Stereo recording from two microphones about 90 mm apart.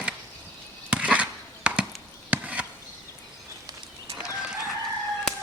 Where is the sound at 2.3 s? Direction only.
15° right (ahead or behind).